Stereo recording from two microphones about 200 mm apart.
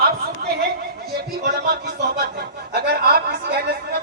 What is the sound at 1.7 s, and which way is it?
Speech, 50° right (ahead or behind).